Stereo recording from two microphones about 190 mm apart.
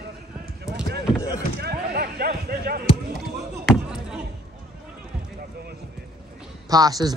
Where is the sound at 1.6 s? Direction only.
55° right (ahead or behind).